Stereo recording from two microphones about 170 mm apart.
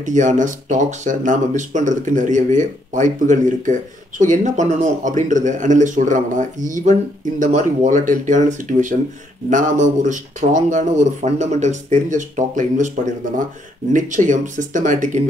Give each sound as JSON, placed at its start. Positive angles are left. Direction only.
{"t": 0.0, "sound": "speech", "side_deg": -45}
{"t": 13.9, "sound": "speech", "side_deg": -50}